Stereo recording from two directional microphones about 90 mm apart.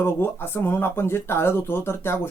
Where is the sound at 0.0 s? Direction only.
25° left (ahead or behind).